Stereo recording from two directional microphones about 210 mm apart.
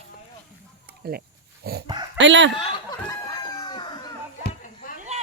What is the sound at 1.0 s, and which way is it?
Speech, 45° right (ahead or behind).